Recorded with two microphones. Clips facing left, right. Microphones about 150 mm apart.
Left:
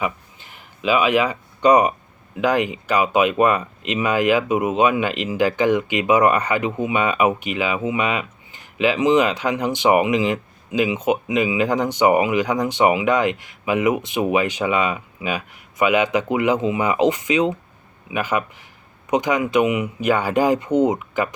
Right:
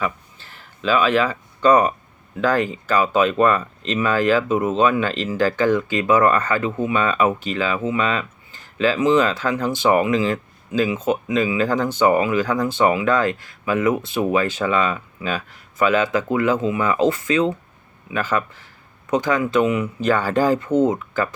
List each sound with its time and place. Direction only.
0.0 s speech: 15° left (ahead or behind)